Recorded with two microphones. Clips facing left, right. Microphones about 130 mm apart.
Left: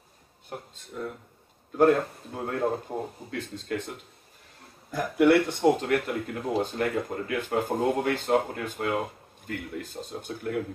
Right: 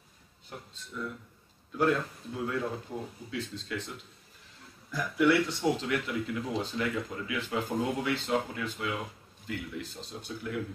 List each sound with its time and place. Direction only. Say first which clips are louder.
0.5 s speech: left 5 dB; 50° left (ahead or behind)